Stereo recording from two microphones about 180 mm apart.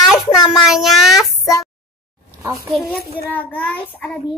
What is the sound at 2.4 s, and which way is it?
Speech, 15° right (ahead or behind).